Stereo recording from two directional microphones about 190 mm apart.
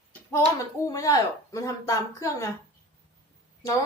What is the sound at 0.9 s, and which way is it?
A woman's voice, 20° left (ahead or behind).